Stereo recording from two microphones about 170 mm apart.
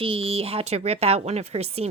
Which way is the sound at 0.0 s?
35° right (ahead or behind).